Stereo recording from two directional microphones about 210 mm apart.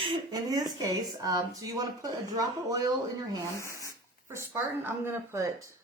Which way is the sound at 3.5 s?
15° left (ahead or behind).